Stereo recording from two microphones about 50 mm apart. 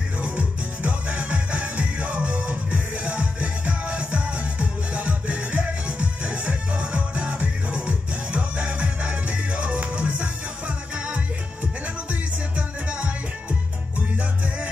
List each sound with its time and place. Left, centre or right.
0.2 s music: right